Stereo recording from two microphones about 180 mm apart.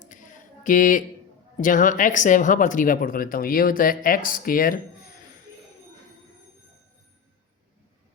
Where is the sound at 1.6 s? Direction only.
45° left (ahead or behind).